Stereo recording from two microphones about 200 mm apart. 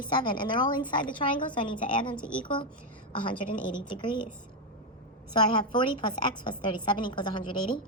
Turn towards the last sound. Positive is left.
turn(degrees=25)  # may be behind; listen again after turning